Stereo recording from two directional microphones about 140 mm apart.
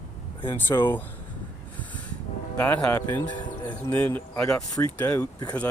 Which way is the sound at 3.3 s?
35° left (ahead or behind).